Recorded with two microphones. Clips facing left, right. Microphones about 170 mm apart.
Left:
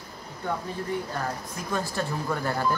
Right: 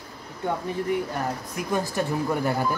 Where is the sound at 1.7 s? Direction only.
15° right (ahead or behind).